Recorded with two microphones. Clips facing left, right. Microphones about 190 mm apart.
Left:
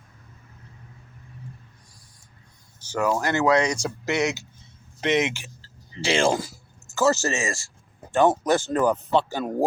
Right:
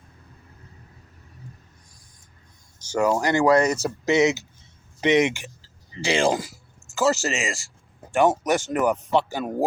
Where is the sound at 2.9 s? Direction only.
10° right (ahead or behind).